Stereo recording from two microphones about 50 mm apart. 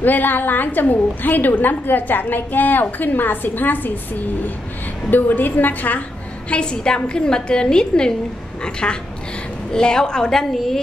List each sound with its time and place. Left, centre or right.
0.0 s a woman's voice: left
6.5 s a woman's voice: centre